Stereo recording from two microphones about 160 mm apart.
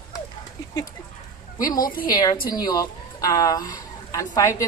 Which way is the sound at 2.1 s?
25° left (ahead or behind).